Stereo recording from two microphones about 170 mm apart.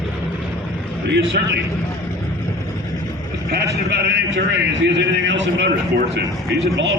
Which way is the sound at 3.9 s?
80° right.